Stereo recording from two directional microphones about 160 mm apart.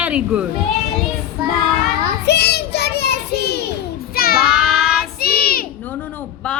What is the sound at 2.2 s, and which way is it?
Child singing, 90° left.